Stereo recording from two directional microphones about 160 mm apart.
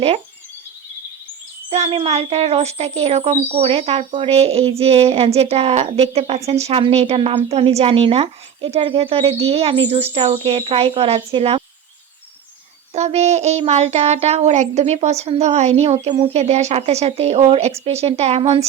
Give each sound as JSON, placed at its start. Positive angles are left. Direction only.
{"t": 1.7, "sound": "a woman's voice", "side_deg": -40}
{"t": 12.9, "sound": "child singing", "side_deg": -45}
{"t": 16.1, "sound": "a woman's voice", "side_deg": -40}